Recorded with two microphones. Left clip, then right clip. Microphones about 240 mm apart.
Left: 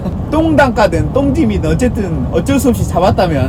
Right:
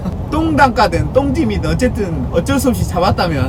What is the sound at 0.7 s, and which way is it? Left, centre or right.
Speech, centre.